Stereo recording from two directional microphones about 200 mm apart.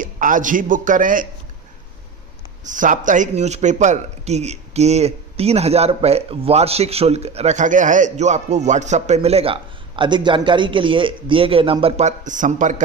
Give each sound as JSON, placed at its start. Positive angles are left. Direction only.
{"t": 0.0, "sound": "speech", "side_deg": -40}
{"t": 2.6, "sound": "speech", "side_deg": -40}